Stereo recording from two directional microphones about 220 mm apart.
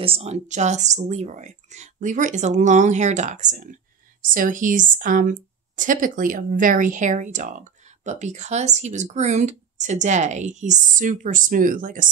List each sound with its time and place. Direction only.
0.0 s speech: 25° right (ahead or behind)